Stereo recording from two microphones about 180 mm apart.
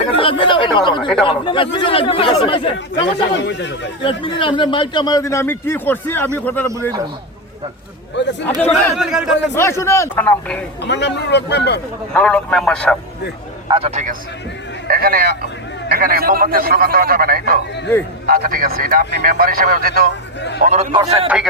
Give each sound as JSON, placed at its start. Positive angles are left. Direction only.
{"t": 0.2, "sound": "a sound", "side_deg": 30}
{"t": 1.2, "sound": "speech", "side_deg": 30}
{"t": 2.7, "sound": "speech", "side_deg": 80}
{"t": 4.2, "sound": "a man's voice", "side_deg": 30}
{"t": 8.1, "sound": "speech", "side_deg": 80}
{"t": 9.0, "sound": "a man's voice", "side_deg": -5}
{"t": 9.6, "sound": "a man's voice", "side_deg": 15}
{"t": 10.8, "sound": "speech", "side_deg": 75}
{"t": 12.1, "sound": "a man's voice", "side_deg": 5}
{"t": 13.7, "sound": "speech", "side_deg": -30}
{"t": 14.8, "sound": "a man's voice", "side_deg": -55}
{"t": 20.9, "sound": "speech", "side_deg": -30}